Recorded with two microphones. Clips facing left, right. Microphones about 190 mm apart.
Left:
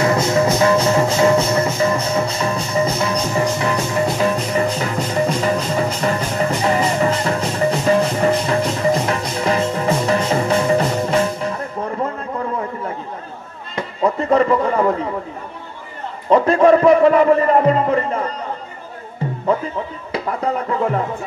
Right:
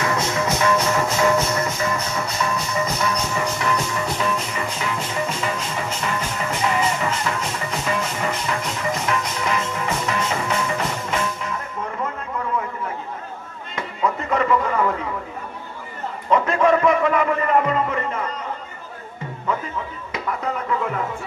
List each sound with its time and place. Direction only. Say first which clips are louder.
0.0 s music: left 7 dB; 30° left (ahead or behind)
13.7 s music: left 5 dB; 35° left (ahead or behind)
16.3 s music: left 6 dB; 35° left (ahead or behind)
20.1 s a sound: left 5 dB; 35° left (ahead or behind)